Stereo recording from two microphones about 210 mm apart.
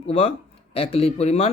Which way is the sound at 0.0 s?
30° left (ahead or behind).